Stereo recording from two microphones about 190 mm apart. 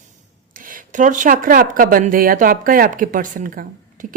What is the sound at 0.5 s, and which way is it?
Speech, 45° right (ahead or behind).